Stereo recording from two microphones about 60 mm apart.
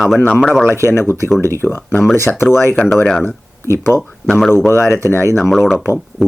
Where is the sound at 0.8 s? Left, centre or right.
Left.